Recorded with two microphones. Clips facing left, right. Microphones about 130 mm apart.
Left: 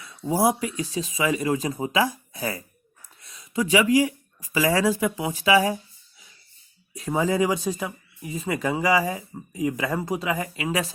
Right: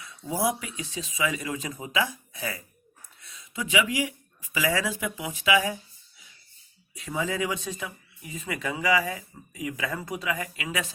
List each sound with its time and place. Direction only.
0.0 s speech: 35° left (ahead or behind)
6.9 s speech: 40° left (ahead or behind)